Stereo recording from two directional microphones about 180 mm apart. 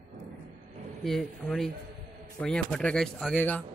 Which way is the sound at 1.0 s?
Centre (ahead or behind).